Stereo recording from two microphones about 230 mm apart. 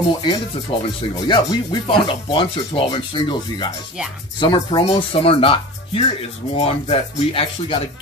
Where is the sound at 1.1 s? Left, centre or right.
Centre.